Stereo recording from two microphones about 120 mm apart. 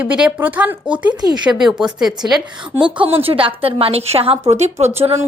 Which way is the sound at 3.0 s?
50° right (ahead or behind).